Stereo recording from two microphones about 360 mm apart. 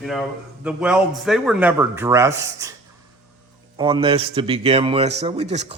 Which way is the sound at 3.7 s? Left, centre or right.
Centre.